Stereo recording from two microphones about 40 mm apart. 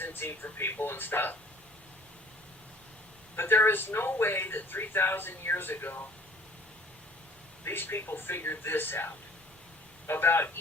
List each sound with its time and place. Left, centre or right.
0.0 s speech: left
3.3 s speech: left
7.6 s speech: left